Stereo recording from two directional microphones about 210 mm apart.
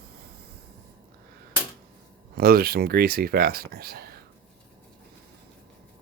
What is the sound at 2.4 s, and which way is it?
Speech, 45° right (ahead or behind).